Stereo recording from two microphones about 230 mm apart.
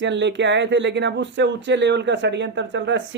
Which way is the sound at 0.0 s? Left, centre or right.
Right.